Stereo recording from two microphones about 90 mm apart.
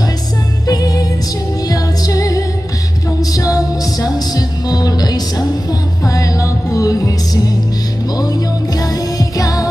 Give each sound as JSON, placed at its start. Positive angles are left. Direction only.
{"t": 0.7, "sound": "music", "side_deg": 45}